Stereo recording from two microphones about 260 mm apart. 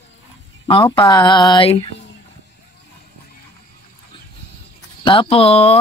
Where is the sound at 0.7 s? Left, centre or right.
Centre.